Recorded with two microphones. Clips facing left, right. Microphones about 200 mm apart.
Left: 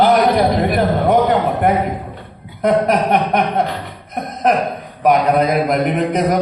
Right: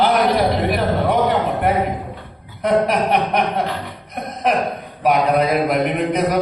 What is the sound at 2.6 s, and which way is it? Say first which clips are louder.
Speech: left 2 dB; 45° left (ahead or behind).